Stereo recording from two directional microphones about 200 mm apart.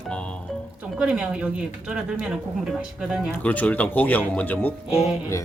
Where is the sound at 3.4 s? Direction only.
5° left (ahead or behind).